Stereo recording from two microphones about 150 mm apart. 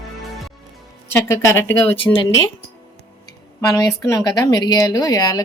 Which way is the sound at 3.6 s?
25° left (ahead or behind).